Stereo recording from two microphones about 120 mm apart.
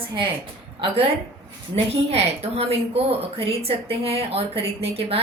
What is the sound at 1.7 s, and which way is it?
A woman's voice, 60° right (ahead or behind).